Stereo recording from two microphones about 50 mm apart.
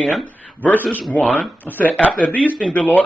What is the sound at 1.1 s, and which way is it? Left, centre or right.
Speech, left.